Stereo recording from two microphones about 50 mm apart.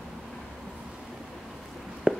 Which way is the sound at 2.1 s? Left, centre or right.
Centre.